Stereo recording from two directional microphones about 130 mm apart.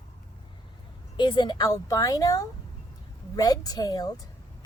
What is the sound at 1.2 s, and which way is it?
A woman's voice, 35° left (ahead or behind).